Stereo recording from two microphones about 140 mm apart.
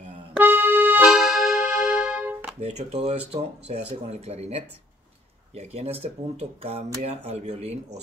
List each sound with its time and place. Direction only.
0.3 s music: 15° right (ahead or behind)
2.6 s speech: 50° right (ahead or behind)